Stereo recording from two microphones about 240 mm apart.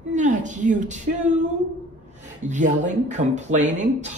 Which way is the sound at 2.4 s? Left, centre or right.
Right.